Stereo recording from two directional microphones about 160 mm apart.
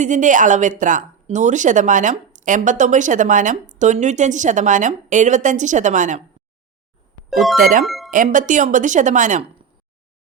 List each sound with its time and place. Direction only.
0.0 s speech: 50° right (ahead or behind)
7.3 s speech: centre (ahead or behind)
7.5 s speech: 55° right (ahead or behind)
7.9 s music: centre (ahead or behind)
8.1 s speech: 55° right (ahead or behind)